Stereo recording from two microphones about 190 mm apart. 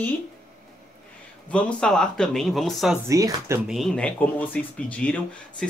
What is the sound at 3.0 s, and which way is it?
Speech, 15° right (ahead or behind).